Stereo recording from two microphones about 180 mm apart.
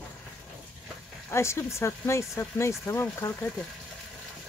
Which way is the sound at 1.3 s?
15° left (ahead or behind).